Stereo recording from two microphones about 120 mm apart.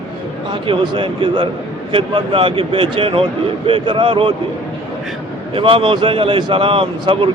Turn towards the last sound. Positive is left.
turn(degrees=-50)  # may be behind; listen again after turning